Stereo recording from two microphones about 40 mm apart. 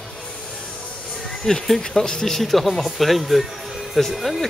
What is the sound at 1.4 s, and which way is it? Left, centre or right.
Speech, centre.